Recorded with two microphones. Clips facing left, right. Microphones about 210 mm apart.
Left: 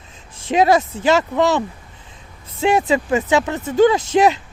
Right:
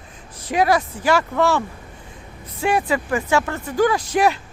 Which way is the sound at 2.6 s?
20° left (ahead or behind).